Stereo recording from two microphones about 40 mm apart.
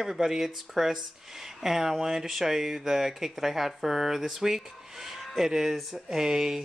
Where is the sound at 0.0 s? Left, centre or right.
Centre.